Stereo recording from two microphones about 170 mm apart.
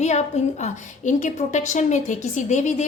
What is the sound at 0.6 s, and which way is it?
A woman's voice, 45° left (ahead or behind).